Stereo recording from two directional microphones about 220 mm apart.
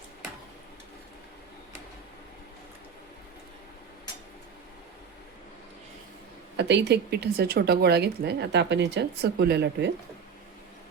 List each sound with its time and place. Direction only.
6.6 s speech: 50° right (ahead or behind)